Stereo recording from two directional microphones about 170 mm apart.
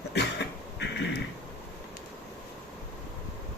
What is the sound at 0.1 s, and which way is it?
Cough, 90° left.